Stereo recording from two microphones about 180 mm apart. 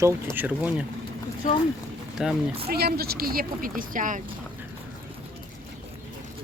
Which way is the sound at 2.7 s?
60° right (ahead or behind).